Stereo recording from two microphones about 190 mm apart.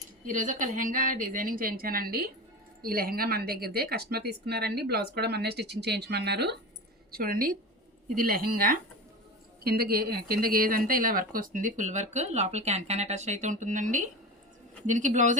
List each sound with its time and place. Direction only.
0.3 s a woman's voice: 45° right (ahead or behind); by 6.6 s 60° right (ahead or behind)
7.1 s a woman's voice: 50° right (ahead or behind)